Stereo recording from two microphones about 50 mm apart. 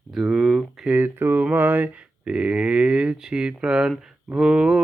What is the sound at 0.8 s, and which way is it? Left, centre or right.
Speech, right.